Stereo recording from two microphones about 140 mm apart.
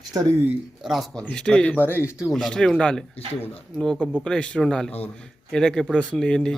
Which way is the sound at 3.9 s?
10° right (ahead or behind).